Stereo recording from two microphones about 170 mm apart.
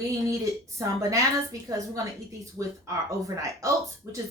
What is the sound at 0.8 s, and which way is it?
A woman's voice, 20° right (ahead or behind).